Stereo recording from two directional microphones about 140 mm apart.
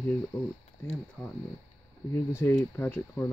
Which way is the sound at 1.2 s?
5° left (ahead or behind).